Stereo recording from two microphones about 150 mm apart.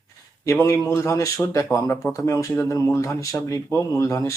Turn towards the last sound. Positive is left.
turn(degrees=20)  # may be behind; listen again after turning